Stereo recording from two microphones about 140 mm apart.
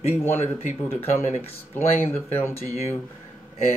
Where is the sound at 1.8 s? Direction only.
50° left (ahead or behind).